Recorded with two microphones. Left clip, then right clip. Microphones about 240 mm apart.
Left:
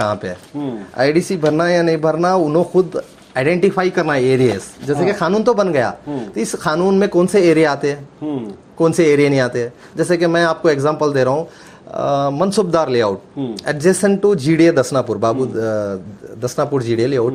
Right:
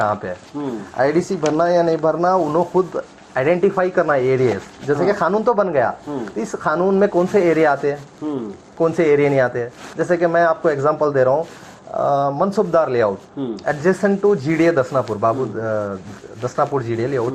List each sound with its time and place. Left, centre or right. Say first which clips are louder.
0.0 s speech: even; left
0.5 s speech: left 2 dB; centre
0.9 s speech: left 2 dB; left